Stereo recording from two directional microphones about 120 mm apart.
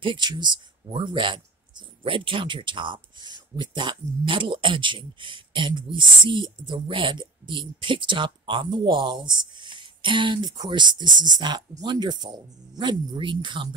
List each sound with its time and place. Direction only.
0.0 s speech: 40° right (ahead or behind)